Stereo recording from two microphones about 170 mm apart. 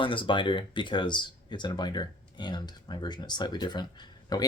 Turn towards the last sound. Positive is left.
turn(degrees=25)  # may be behind; listen again after turning